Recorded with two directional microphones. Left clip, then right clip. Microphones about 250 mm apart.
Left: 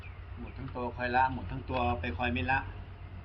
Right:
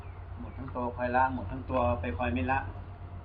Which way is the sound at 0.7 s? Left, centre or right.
Left.